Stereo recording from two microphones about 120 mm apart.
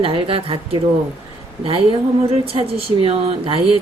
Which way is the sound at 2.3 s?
55° right (ahead or behind).